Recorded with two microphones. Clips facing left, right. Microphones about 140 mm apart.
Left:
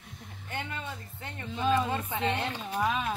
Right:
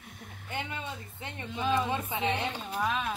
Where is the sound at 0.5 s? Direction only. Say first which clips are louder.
Even; 15° right (ahead or behind).